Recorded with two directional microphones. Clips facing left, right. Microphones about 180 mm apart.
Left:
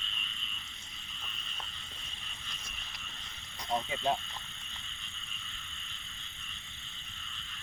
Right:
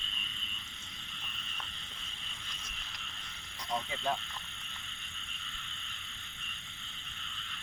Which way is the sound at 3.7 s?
25° left (ahead or behind).